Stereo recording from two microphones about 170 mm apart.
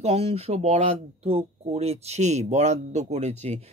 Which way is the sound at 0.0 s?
35° right (ahead or behind).